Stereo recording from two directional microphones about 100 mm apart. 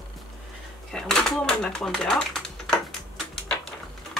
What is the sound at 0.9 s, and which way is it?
Speech, 5° left (ahead or behind).